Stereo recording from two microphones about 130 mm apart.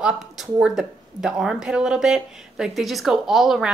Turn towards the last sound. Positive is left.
turn(degrees=0)  # may be behind; listen again after turning